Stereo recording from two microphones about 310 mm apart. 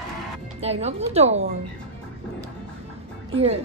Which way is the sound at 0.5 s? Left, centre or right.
Centre.